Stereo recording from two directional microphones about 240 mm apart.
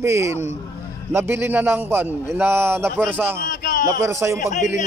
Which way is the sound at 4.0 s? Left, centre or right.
Centre.